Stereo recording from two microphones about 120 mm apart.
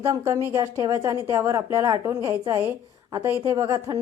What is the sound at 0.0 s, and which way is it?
Speech, 25° right (ahead or behind).